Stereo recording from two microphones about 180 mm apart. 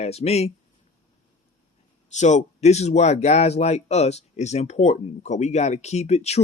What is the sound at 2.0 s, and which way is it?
Speech, 40° left (ahead or behind).